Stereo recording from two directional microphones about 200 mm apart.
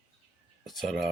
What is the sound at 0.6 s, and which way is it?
Speech, centre (ahead or behind).